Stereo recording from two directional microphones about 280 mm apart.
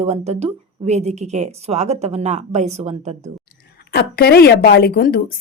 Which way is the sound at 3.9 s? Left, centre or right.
Left.